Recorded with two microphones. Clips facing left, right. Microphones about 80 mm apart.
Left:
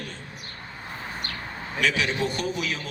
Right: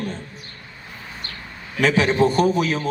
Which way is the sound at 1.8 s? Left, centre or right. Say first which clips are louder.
Right 8 dB; right.